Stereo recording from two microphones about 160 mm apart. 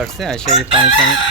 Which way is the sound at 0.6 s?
30° right (ahead or behind).